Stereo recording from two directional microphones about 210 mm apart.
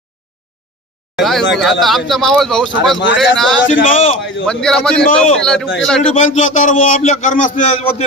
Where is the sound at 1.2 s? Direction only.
Centre (ahead or behind).